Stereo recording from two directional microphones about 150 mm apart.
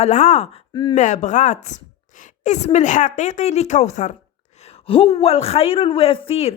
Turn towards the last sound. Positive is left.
turn(degrees=40)  # may be behind; listen again after turning